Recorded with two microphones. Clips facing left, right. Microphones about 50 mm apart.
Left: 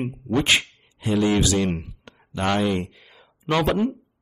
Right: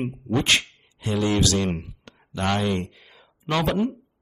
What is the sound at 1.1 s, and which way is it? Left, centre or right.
Speech, centre.